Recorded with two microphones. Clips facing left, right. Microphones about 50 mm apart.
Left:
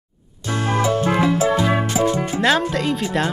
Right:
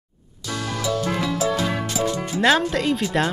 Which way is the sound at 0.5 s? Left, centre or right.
Left.